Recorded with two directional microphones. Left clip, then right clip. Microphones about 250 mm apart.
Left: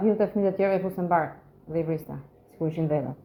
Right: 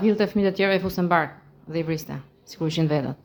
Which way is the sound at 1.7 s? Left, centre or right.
Centre.